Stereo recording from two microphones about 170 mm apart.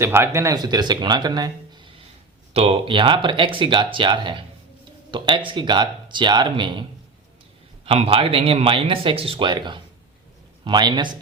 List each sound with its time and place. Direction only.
0.0 s speech: 15° right (ahead or behind)
7.9 s speech: 35° right (ahead or behind)